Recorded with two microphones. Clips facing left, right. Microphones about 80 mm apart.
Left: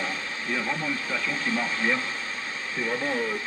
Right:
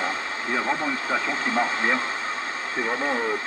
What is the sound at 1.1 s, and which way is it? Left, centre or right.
Speech, right.